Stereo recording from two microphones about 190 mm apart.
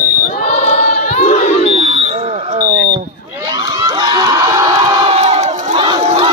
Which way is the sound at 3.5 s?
25° right (ahead or behind).